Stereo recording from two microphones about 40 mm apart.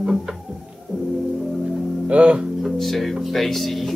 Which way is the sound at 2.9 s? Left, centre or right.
Centre.